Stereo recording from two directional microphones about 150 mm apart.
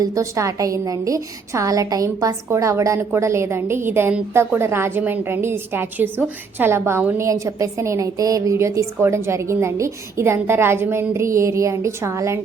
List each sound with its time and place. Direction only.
0.0 s a woman's voice: 20° right (ahead or behind)